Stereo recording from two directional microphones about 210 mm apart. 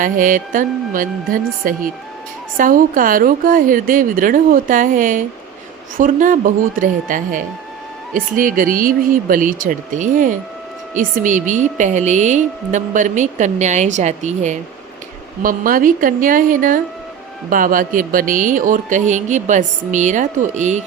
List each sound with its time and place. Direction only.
0.0 s a woman's voice: 40° right (ahead or behind)